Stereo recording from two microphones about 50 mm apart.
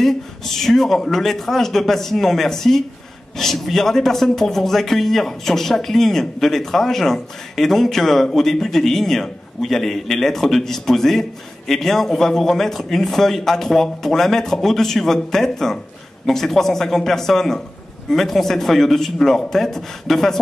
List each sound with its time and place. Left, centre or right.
0.0 s a man's voice: centre